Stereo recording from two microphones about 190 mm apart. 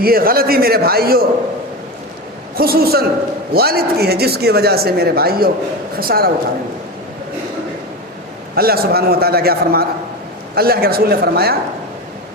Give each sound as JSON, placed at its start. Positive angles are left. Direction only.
{"t": 0.0, "sound": "a man's voice", "side_deg": -50}
{"t": 2.6, "sound": "a man's voice", "side_deg": -55}
{"t": 8.5, "sound": "a man's voice", "side_deg": -55}